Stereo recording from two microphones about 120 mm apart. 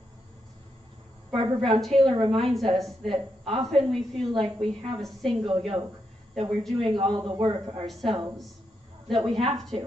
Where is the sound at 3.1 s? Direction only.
50° right (ahead or behind).